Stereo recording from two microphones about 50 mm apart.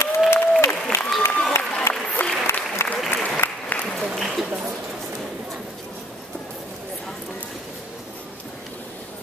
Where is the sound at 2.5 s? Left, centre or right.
Left.